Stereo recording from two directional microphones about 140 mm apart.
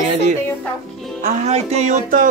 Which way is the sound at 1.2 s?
55° right (ahead or behind).